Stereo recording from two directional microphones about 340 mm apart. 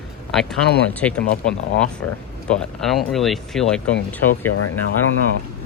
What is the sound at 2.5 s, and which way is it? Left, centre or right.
Speech, centre.